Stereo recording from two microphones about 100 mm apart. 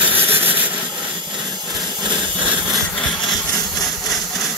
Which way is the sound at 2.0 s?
5° right (ahead or behind).